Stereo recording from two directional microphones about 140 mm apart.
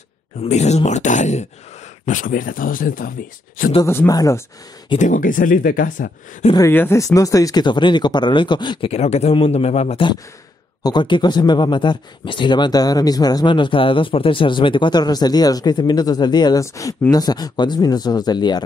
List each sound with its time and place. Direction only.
0.4 s speech: 55° left (ahead or behind)
2.0 s speech: 70° left (ahead or behind)
3.8 s speech: 15° left (ahead or behind)
4.9 s speech: 65° left (ahead or behind)
6.7 s speech: 15° left (ahead or behind); by 8.9 s 35° left (ahead or behind)
8.9 s speech: 50° left (ahead or behind)
10.8 s speech: 30° left (ahead or behind)